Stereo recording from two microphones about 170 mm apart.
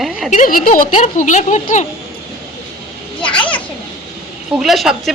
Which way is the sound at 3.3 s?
30° left (ahead or behind).